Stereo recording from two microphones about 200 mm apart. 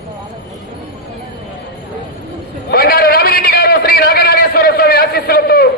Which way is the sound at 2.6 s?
50° left (ahead or behind).